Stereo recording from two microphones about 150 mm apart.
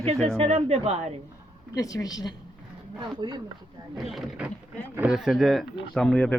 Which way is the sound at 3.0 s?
30° right (ahead or behind).